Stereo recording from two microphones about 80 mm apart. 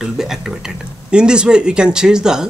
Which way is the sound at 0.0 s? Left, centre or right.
Centre.